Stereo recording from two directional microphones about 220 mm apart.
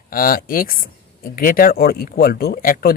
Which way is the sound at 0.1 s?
40° left (ahead or behind).